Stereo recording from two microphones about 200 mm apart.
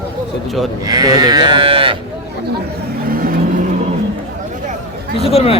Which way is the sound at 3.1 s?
45° right (ahead or behind).